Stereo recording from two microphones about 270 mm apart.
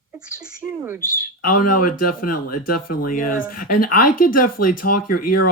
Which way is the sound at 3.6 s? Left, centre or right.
Left.